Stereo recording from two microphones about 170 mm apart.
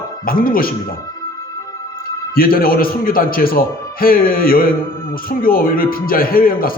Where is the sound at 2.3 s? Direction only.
60° left (ahead or behind).